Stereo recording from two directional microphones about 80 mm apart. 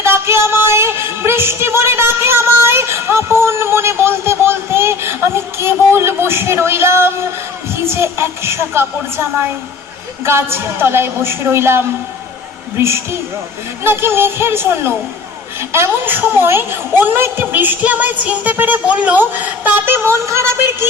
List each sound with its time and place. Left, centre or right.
0.0 s a sound: right
7.9 s a woman's voice: right
10.2 s a woman's voice: right